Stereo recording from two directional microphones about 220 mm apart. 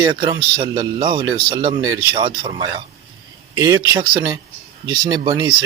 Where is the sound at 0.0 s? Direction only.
20° right (ahead or behind).